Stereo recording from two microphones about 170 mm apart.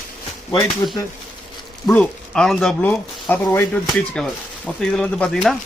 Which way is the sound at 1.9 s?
5° left (ahead or behind).